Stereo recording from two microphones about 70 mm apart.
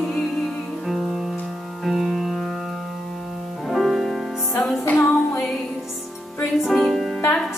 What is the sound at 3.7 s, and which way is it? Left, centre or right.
Music, centre.